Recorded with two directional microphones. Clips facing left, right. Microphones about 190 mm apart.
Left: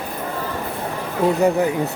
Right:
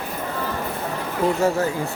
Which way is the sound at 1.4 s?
15° left (ahead or behind).